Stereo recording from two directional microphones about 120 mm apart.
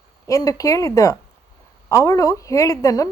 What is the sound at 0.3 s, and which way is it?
A woman's voice, 25° left (ahead or behind).